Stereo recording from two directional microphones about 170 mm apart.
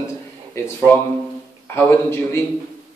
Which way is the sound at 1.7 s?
15° left (ahead or behind).